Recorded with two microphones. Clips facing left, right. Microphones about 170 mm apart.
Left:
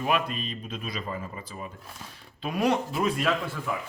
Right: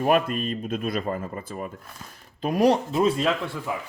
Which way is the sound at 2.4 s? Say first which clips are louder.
Right 5 dB; 40° right (ahead or behind).